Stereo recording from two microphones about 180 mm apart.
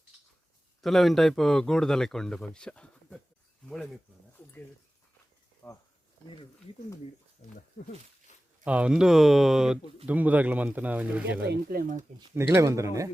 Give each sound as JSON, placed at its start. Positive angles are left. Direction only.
{"t": 0.8, "sound": "speech", "side_deg": 0}
{"t": 5.6, "sound": "speech", "side_deg": 5}
{"t": 7.4, "sound": "speech", "side_deg": 55}
{"t": 8.6, "sound": "speech", "side_deg": -5}
{"t": 11.5, "sound": "speech", "side_deg": -55}
{"t": 12.3, "sound": "speech", "side_deg": -15}